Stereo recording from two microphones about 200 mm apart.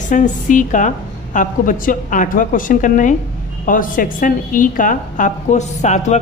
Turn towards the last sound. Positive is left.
turn(degrees=35)  # may be behind; listen again after turning